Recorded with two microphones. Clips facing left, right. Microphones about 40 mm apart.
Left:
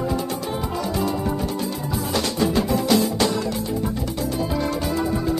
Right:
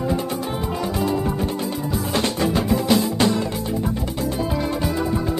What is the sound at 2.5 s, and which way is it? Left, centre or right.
Music, centre.